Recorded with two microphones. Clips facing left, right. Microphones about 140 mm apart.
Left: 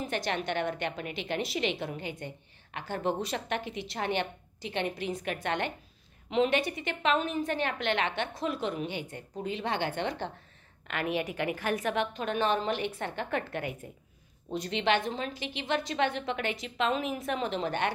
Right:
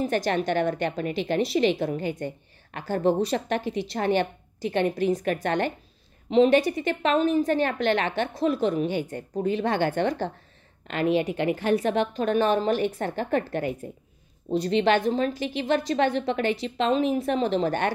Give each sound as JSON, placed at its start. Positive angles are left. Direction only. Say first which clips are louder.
{"t": 0.0, "sound": "a woman's voice", "louder": "right 8 dB", "side_deg": -40}
{"t": 10.9, "sound": "a woman's voice", "louder": "right 8 dB", "side_deg": -30}